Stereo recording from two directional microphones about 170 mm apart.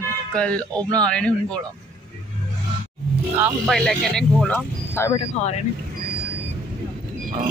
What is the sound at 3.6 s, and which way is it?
Speech, centre (ahead or behind).